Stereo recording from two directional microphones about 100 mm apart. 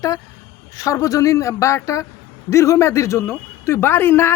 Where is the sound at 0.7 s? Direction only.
35° left (ahead or behind).